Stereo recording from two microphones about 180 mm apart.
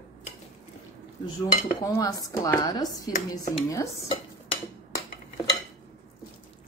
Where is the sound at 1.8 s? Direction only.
20° left (ahead or behind).